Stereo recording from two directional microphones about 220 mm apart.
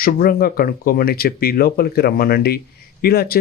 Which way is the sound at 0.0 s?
40° left (ahead or behind).